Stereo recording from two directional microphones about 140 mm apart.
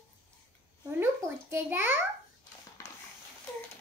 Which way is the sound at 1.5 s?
15° right (ahead or behind).